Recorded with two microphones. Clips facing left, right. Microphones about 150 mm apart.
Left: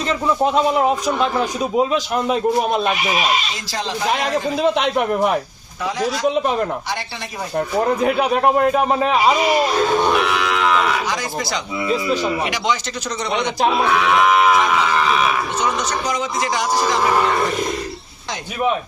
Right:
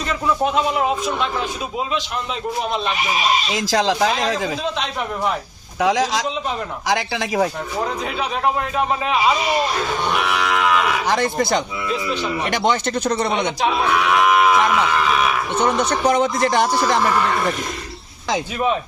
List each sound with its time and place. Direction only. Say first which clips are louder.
0.1 s a man's voice: left 2 dB; 40° left (ahead or behind)
3.5 s speech: right 7 dB; 90° right
4.6 s a man's voice: left 7 dB; 60° left (ahead or behind)
5.8 s speech: right 4 dB; 90° right
6.2 s a man's voice: left 7 dB; 55° left (ahead or behind)
6.8 s speech: right 6 dB; 90° right
8.0 s a man's voice: left 6 dB; 50° left (ahead or behind)
11.1 s a man's voice: right 5 dB; 55° right (ahead or behind)
15.5 s a man's voice: right 3 dB; 60° right (ahead or behind)